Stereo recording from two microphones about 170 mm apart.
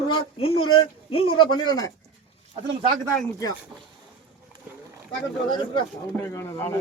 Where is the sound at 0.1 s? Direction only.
35° left (ahead or behind).